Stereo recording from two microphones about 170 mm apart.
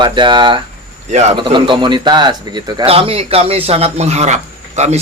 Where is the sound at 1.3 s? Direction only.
25° right (ahead or behind).